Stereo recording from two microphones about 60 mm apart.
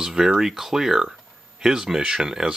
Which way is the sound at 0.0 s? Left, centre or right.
Centre.